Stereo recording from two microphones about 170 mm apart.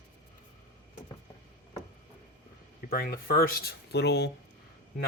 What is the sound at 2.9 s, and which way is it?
Speech, 60° left (ahead or behind).